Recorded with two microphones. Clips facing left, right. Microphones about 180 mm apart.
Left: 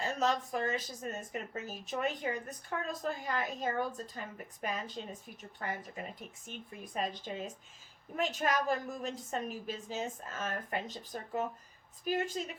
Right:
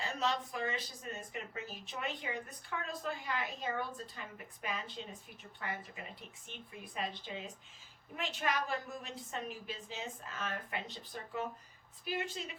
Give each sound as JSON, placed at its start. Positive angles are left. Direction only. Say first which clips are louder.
{"t": 0.0, "sound": "speech", "louder": "left 4 dB", "side_deg": 45}